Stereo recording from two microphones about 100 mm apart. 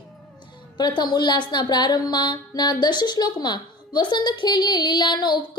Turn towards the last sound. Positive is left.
turn(degrees=50)  # may be behind; listen again after turning